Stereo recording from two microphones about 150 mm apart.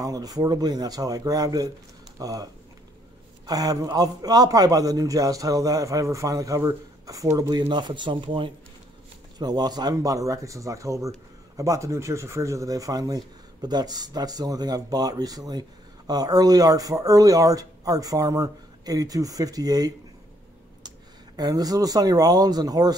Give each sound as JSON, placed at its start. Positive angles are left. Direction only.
{"t": 0.0, "sound": "speech", "side_deg": -25}
{"t": 21.4, "sound": "speech", "side_deg": -25}